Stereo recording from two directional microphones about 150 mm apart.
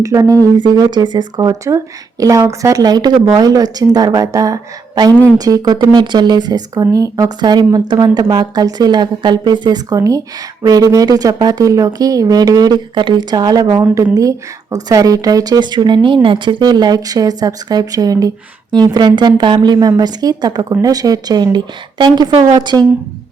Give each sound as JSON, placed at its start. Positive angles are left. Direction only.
{"t": 0.0, "sound": "speech", "side_deg": -20}